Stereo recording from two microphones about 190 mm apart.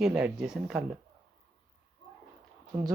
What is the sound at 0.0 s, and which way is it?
Speech, 5° right (ahead or behind).